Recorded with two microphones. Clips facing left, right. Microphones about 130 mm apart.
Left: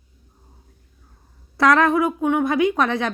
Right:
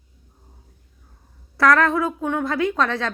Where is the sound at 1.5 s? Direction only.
20° left (ahead or behind).